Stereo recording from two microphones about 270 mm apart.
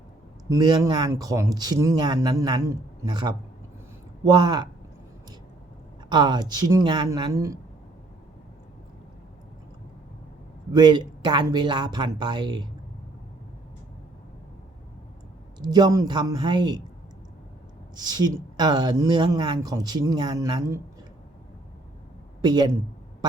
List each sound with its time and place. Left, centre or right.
0.5 s speech: centre
6.1 s speech: centre
10.7 s speech: centre
15.6 s speech: centre
17.9 s speech: centre
22.4 s speech: centre